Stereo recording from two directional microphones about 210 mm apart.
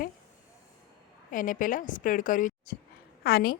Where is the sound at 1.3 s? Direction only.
40° left (ahead or behind).